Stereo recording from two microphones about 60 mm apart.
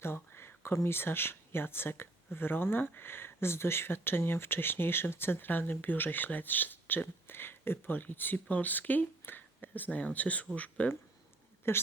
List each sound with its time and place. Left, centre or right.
0.0 s a sound: left
0.8 s speech: left
11.6 s a woman's voice: left